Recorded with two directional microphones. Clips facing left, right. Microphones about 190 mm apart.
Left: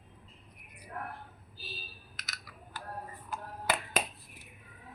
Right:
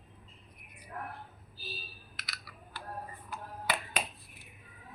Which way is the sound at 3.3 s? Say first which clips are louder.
Left 3 dB; 50° left (ahead or behind).